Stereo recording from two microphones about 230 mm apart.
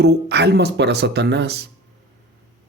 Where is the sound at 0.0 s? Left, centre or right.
Right.